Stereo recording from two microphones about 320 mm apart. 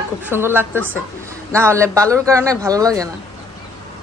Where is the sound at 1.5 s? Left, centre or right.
Centre.